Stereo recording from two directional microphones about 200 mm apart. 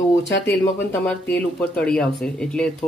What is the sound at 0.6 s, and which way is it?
Speech, 10° left (ahead or behind).